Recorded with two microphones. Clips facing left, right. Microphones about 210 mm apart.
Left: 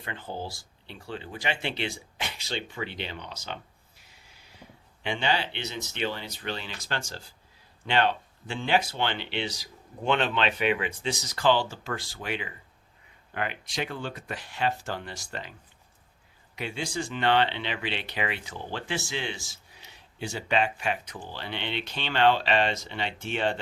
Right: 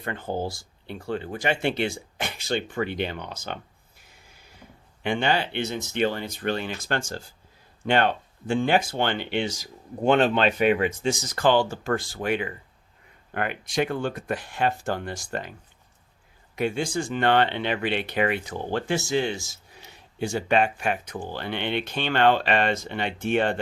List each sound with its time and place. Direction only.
0.0 s speech: 50° right (ahead or behind)
16.6 s speech: 50° right (ahead or behind)